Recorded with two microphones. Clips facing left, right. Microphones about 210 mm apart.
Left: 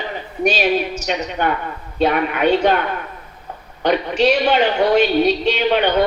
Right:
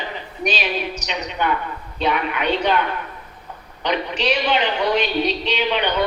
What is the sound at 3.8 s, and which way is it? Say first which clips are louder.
A woman's voice: left 6 dB; 45° left (ahead or behind).